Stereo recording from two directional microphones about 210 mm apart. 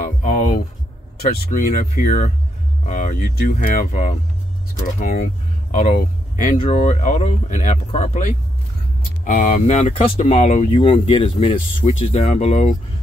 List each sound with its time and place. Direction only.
0.2 s a sound: 35° left (ahead or behind)
1.2 s speech: 35° left (ahead or behind)
3.3 s speech: 40° left (ahead or behind)